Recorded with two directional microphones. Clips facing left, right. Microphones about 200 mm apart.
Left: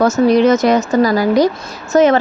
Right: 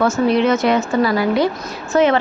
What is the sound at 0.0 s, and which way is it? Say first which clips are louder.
A woman's voice: left 4 dB; 40° left (ahead or behind).